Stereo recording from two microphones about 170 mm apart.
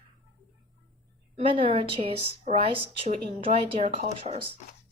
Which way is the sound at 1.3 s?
30° right (ahead or behind).